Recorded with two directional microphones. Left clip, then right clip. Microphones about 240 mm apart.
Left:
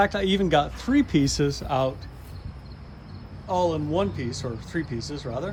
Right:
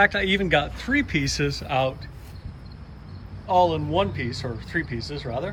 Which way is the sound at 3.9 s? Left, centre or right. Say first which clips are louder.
Right 2 dB; centre.